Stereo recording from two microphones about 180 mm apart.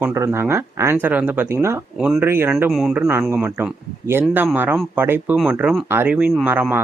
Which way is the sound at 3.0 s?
15° right (ahead or behind).